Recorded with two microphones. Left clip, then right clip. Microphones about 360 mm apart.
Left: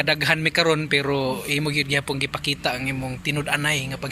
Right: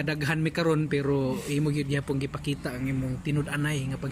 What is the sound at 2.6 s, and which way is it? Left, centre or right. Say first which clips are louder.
Speech: left 9 dB; left.